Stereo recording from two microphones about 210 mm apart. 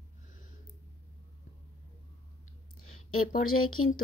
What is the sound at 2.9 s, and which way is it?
Speech, 90° left.